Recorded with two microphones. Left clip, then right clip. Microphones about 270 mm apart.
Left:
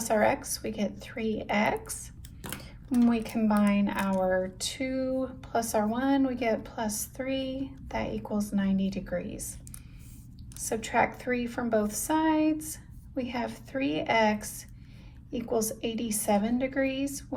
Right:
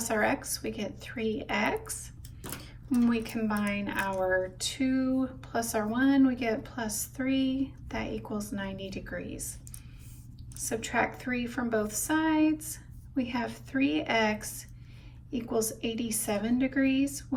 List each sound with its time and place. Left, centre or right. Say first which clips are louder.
0.0 s speech: left 3 dB; left
10.6 s speech: left 3 dB; left